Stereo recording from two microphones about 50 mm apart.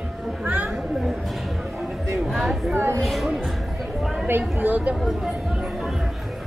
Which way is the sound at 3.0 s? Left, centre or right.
Centre.